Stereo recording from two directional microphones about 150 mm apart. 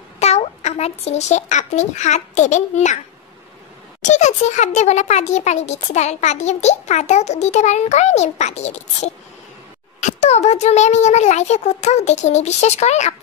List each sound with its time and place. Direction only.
0.2 s a child's voice: 45° left (ahead or behind)
4.0 s a child's voice: 50° left (ahead or behind)